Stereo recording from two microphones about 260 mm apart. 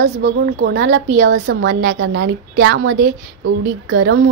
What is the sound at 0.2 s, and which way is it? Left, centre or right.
A woman's voice, right.